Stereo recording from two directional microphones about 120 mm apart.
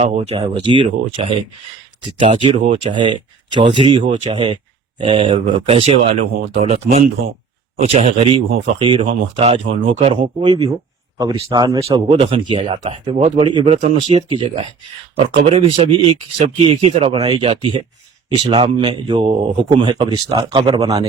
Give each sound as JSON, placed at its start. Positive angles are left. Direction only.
{"t": 0.1, "sound": "speech", "side_deg": -55}
{"t": 0.3, "sound": "speech", "side_deg": -40}
{"t": 6.4, "sound": "speech", "side_deg": -70}
{"t": 9.2, "sound": "speech", "side_deg": -60}
{"t": 11.5, "sound": "speech", "side_deg": -35}
{"t": 12.8, "sound": "speech", "side_deg": -65}
{"t": 13.3, "sound": "speech", "side_deg": -40}
{"t": 13.7, "sound": "speech", "side_deg": -80}
{"t": 14.1, "sound": "speech", "side_deg": -50}
{"t": 20.8, "sound": "a man's voice", "side_deg": -30}